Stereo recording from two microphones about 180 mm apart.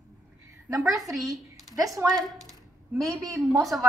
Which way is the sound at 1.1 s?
Centre (ahead or behind).